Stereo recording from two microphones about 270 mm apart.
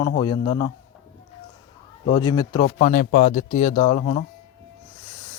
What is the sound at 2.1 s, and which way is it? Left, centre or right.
Speech, centre.